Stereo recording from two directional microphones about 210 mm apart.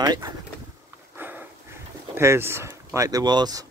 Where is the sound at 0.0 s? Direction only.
15° right (ahead or behind).